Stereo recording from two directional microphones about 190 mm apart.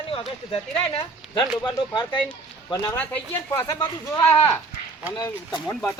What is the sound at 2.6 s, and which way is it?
Speech, 20° left (ahead or behind).